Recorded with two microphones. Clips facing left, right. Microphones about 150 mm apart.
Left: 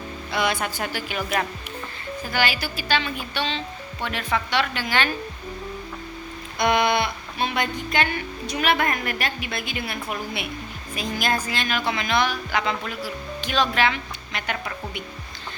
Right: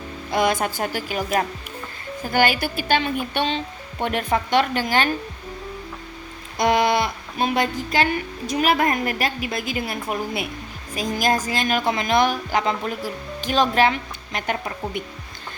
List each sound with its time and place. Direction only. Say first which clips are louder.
0.3 s speech: right 4 dB; 45° right (ahead or behind)
2.2 s speech: right 5 dB; 50° right (ahead or behind)
6.6 s a woman's voice: right 2 dB; 40° right (ahead or behind)